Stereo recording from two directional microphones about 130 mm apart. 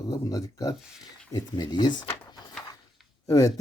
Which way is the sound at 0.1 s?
25° left (ahead or behind).